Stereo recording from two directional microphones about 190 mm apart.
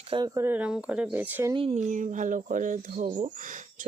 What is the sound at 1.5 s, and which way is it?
Speech, 35° right (ahead or behind).